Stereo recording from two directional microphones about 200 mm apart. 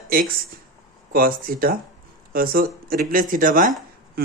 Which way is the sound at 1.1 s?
45° right (ahead or behind).